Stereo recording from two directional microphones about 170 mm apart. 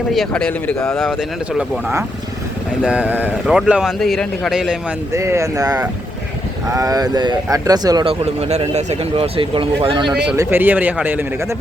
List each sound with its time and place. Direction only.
0.1 s speech: 5° left (ahead or behind)
2.8 s speech: 5° right (ahead or behind)
5.1 s speech: 15° right (ahead or behind)
8.2 s speech: 40° right (ahead or behind)
10.3 s speech: 10° right (ahead or behind)